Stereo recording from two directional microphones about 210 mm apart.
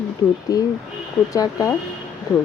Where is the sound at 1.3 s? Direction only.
15° left (ahead or behind).